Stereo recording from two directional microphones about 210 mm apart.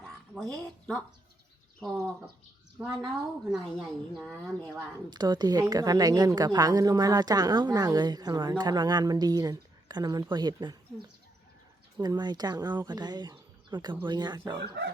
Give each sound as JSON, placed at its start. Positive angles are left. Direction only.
{"t": 0.0, "sound": "speech", "side_deg": 5}
{"t": 3.2, "sound": "a woman's voice", "side_deg": 0}
{"t": 5.1, "sound": "a woman's voice", "side_deg": -20}
{"t": 14.6, "sound": "speech", "side_deg": -50}